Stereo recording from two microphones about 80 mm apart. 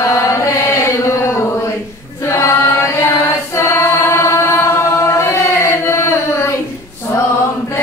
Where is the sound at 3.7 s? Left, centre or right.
Left.